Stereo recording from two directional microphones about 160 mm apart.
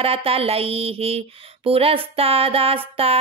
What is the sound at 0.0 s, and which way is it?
Speech, 35° right (ahead or behind).